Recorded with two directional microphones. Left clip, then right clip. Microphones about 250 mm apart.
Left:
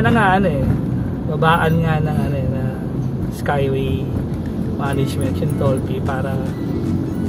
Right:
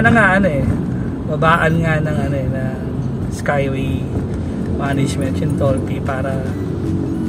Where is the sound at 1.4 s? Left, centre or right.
Centre.